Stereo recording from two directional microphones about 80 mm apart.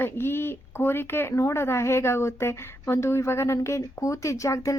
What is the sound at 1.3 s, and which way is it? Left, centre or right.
A woman's voice, left.